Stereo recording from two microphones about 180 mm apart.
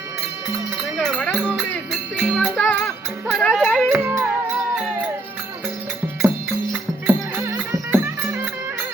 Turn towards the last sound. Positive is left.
turn(degrees=-20)  # may be behind; listen again after turning